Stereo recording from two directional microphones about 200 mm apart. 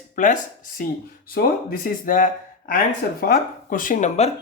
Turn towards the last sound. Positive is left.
turn(degrees=35)  # may be behind; listen again after turning